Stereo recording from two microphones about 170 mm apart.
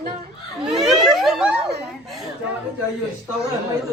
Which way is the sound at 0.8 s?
Centre (ahead or behind).